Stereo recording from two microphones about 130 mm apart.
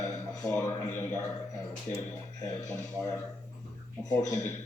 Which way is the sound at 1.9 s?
90° left.